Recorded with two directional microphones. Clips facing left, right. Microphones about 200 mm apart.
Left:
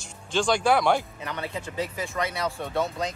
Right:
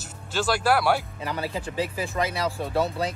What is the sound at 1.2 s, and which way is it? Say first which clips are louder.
Speech: right 3 dB; 35° right (ahead or behind).